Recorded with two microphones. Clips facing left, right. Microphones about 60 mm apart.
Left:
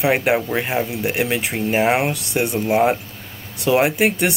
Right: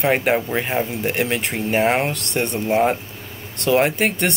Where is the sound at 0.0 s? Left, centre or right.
Centre.